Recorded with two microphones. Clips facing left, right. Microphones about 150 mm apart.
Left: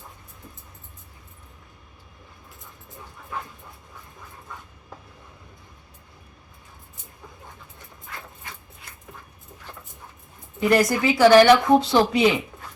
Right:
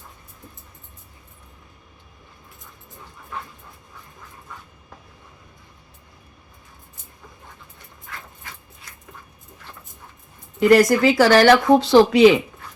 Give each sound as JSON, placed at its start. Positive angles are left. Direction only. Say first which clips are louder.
{"t": 10.6, "sound": "speech", "louder": "right 6 dB", "side_deg": -85}